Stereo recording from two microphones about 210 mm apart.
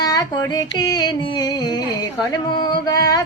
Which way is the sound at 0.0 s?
15° left (ahead or behind).